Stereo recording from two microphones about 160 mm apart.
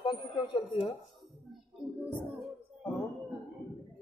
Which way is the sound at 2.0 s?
10° right (ahead or behind).